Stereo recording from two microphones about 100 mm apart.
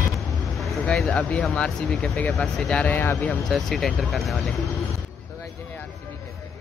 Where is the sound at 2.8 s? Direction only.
20° left (ahead or behind).